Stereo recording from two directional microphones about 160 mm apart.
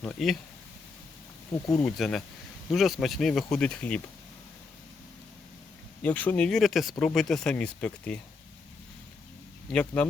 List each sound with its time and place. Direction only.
0.0 s speech: centre (ahead or behind)
1.8 s speech: centre (ahead or behind)
6.0 s speech: 10° left (ahead or behind)
9.7 s speech: 5° left (ahead or behind)